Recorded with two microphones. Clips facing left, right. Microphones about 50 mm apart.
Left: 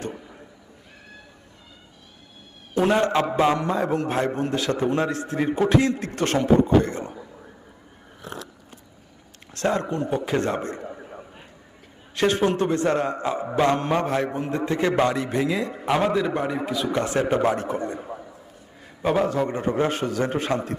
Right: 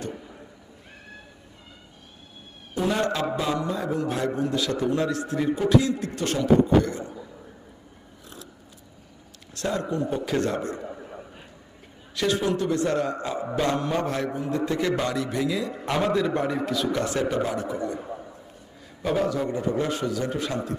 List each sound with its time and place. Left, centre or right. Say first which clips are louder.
0.1 s a sound: even; centre
2.9 s a man's voice: left 5 dB; left
3.3 s a man's voice: left 6 dB; left
8.2 s scissors: left 9 dB; left
9.6 s a man's voice: left 3 dB; left
10.8 s a sound: even; centre
12.1 s a man's voice: left 3 dB; left
15.7 s a man's voice: left 3 dB; centre; by 18.0 s left
19.0 s a man's voice: left 3 dB; left